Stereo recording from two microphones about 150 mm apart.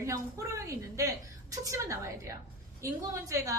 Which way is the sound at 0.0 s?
20° right (ahead or behind).